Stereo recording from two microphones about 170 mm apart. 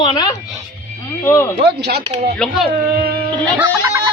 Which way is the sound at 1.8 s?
75° right (ahead or behind).